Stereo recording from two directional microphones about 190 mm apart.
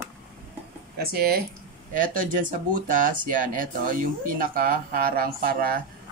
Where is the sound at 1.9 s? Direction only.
45° right (ahead or behind).